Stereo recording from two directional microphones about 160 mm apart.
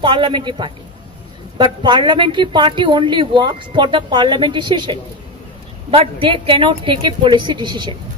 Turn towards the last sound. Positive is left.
turn(degrees=-30)  # may be behind; listen again after turning